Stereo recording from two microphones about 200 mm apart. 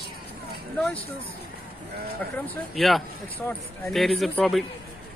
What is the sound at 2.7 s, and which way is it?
Speech, centre (ahead or behind).